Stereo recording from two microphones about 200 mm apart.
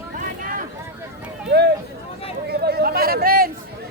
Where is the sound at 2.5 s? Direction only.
50° right (ahead or behind).